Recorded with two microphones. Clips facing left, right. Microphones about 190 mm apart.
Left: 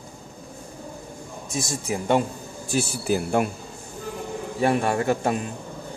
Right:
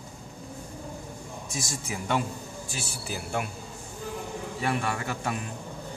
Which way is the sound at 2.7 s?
45° left (ahead or behind).